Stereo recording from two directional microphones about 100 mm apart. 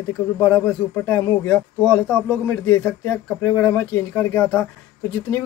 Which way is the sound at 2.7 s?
15° left (ahead or behind).